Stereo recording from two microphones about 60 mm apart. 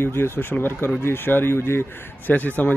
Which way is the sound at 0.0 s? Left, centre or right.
Left.